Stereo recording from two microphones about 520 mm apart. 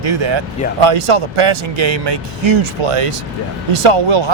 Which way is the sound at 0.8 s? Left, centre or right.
Right.